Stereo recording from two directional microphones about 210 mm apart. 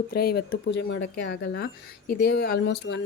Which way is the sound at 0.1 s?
45° left (ahead or behind).